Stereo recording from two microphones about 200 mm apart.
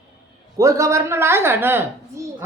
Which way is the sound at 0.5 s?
15° right (ahead or behind).